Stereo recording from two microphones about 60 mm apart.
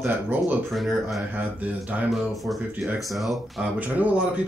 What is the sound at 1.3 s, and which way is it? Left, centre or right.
Speech, right.